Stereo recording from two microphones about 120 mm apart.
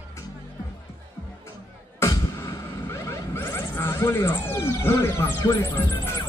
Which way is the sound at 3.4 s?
20° left (ahead or behind).